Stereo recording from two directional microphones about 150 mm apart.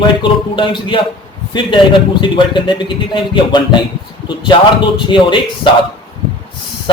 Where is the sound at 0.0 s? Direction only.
35° left (ahead or behind).